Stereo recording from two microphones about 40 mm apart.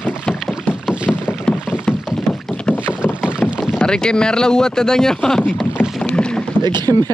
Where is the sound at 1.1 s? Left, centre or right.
Centre.